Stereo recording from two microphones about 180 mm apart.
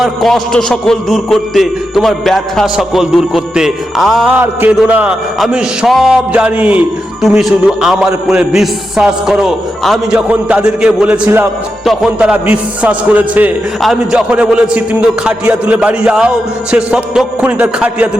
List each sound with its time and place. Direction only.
0.0 s a man's voice: centre (ahead or behind)